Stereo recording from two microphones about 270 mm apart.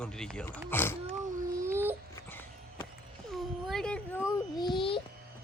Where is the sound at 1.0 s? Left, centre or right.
Centre.